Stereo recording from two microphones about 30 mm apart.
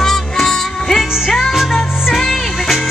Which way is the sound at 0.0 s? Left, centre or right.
Centre.